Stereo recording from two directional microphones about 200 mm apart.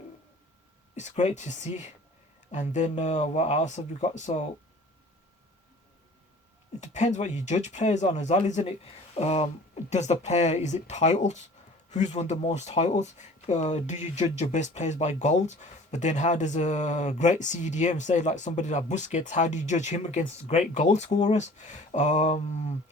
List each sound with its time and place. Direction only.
0.9 s speech: 35° left (ahead or behind)
6.7 s speech: 35° left (ahead or behind)